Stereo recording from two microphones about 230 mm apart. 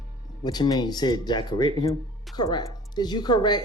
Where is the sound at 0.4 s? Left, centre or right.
Centre.